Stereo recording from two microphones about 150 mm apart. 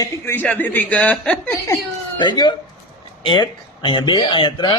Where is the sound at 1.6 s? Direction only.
25° left (ahead or behind).